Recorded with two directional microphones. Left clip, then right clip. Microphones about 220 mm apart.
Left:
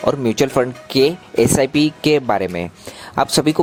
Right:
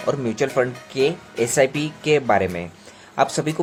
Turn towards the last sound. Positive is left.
turn(degrees=35)  # may be behind; listen again after turning